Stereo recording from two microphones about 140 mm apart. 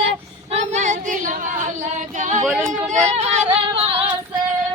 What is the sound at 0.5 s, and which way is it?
Female singing, 55° right (ahead or behind).